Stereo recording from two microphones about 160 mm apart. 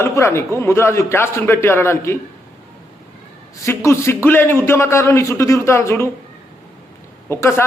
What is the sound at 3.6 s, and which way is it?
A man's voice, 15° left (ahead or behind).